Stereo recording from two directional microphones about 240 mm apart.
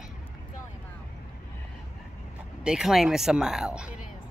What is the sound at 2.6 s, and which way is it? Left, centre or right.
Speech, centre.